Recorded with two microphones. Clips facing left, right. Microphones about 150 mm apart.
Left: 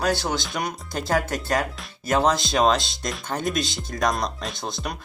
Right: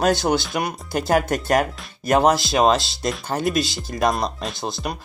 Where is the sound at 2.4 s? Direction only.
5° right (ahead or behind).